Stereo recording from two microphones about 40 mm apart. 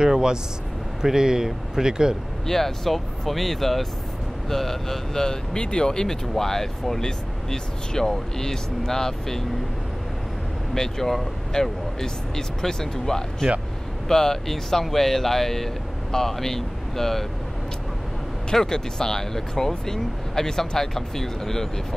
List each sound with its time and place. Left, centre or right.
0.0 s speech: centre
2.4 s speech: centre
10.7 s speech: centre
18.5 s speech: centre